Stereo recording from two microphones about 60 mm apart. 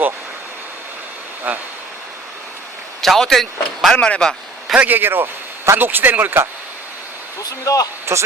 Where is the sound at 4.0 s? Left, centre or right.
Centre.